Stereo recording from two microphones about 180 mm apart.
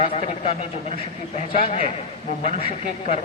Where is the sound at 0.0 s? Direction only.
35° left (ahead or behind).